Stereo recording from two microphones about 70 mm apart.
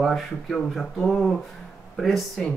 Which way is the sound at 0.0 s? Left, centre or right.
Centre.